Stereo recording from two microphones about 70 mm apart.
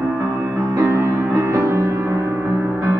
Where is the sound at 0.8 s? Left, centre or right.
Right.